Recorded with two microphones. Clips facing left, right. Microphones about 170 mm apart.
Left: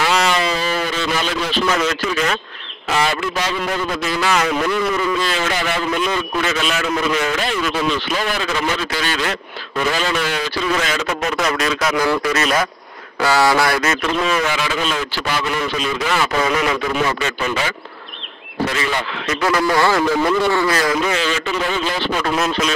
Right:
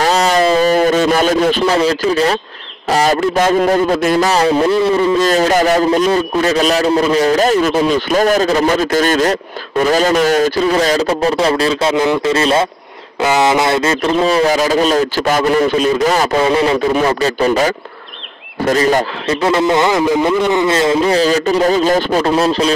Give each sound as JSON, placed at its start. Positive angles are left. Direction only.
{"t": 0.0, "sound": "a sound", "side_deg": -40}
{"t": 1.7, "sound": "a man's voice", "side_deg": -35}
{"t": 5.2, "sound": "a man's voice", "side_deg": -40}
{"t": 19.4, "sound": "a man's voice", "side_deg": -25}
{"t": 22.2, "sound": "a man's voice", "side_deg": -30}